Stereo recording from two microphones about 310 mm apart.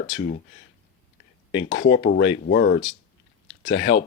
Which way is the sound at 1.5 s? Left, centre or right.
Centre.